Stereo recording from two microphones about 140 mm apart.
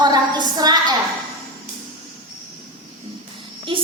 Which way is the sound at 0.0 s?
30° right (ahead or behind).